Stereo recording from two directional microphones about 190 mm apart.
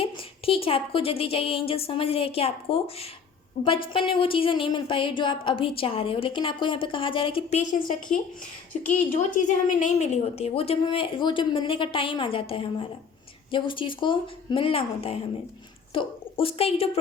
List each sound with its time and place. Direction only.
0.0 s a woman's voice: 30° left (ahead or behind)
7.7 s a woman's voice: 45° left (ahead or behind)